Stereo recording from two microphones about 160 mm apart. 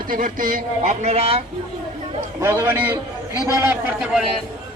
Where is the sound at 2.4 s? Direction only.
15° right (ahead or behind).